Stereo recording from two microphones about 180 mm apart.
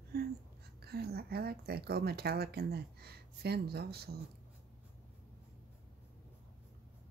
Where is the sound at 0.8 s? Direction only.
60° right (ahead or behind).